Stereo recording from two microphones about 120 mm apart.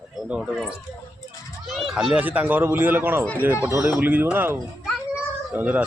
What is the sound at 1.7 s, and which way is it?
Speech, centre (ahead or behind).